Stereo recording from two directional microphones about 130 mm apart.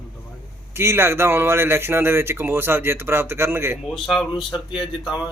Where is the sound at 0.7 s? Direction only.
20° right (ahead or behind).